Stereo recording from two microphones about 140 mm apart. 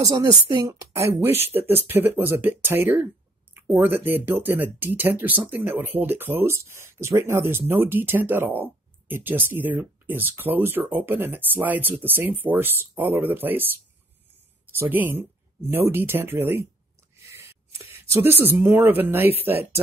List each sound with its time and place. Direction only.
0.0 s a woman's voice: 25° right (ahead or behind)
14.8 s speech: 15° right (ahead or behind)
17.2 s a sound: 20° right (ahead or behind)
18.4 s speech: 15° right (ahead or behind)